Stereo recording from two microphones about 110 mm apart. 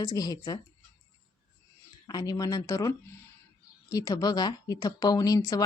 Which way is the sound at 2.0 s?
40° left (ahead or behind).